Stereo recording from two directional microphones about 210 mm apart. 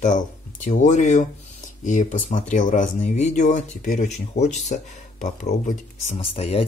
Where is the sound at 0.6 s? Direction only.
35° left (ahead or behind).